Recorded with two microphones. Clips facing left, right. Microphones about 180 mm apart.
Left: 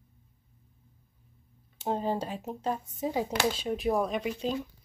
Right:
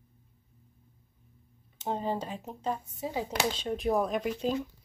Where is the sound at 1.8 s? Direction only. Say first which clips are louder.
Left 2 dB; 10° left (ahead or behind).